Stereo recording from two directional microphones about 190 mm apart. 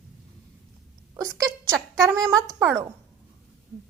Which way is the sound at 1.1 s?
20° right (ahead or behind).